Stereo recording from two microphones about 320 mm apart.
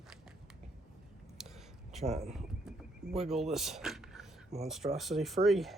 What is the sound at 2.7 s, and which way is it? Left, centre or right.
Pigeon, centre.